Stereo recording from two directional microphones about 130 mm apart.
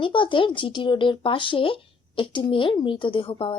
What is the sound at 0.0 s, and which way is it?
Speech, 40° left (ahead or behind).